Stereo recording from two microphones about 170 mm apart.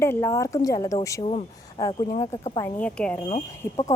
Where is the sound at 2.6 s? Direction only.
5° left (ahead or behind).